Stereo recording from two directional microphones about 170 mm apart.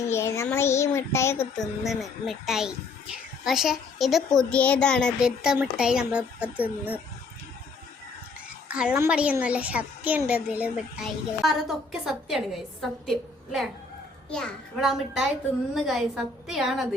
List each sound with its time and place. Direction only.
0.0 s child singing: 15° left (ahead or behind)
1.5 s a child's voice: centre (ahead or behind)
8.7 s a child's voice: 5° right (ahead or behind)